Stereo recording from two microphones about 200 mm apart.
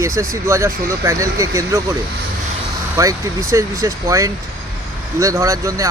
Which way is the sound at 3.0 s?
15° right (ahead or behind).